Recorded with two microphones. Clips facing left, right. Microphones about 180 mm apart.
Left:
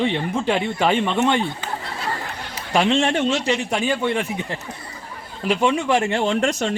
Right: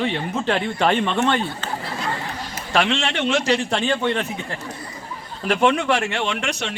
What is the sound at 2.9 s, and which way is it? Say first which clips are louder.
Speech: left 4 dB; 75° right (ahead or behind).